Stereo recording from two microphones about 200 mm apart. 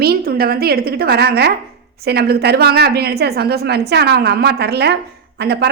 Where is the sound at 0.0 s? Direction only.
50° right (ahead or behind).